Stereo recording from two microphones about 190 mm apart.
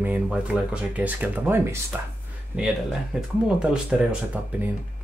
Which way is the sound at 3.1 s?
5° right (ahead or behind).